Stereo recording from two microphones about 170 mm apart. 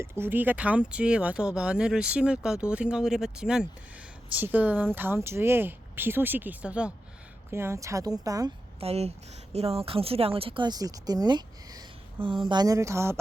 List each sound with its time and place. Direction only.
0.0 s a woman's voice: 15° right (ahead or behind)
8.8 s a woman's voice: 35° right (ahead or behind); by 13.1 s 15° right (ahead or behind)